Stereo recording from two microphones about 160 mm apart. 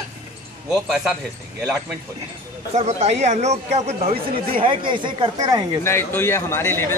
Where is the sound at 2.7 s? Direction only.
45° right (ahead or behind).